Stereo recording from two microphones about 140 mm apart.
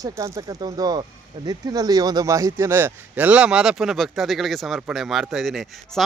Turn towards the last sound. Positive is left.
turn(degrees=0)  # may be behind; listen again after turning